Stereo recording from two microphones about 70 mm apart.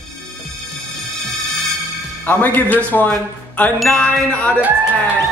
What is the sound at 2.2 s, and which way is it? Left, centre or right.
A man's voice, left.